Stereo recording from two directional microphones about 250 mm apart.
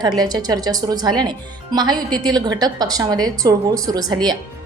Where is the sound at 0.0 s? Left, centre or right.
Centre.